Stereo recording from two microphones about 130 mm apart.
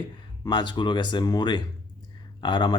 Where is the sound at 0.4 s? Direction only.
35° left (ahead or behind).